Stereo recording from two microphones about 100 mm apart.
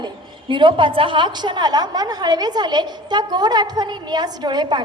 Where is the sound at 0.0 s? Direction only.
55° right (ahead or behind).